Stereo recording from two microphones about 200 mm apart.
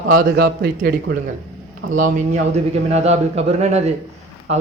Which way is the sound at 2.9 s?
30° right (ahead or behind).